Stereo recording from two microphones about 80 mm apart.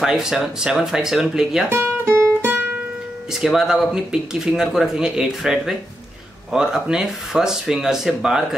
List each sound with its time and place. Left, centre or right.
0.0 s speech: centre
1.7 s music: right
3.5 s speech: centre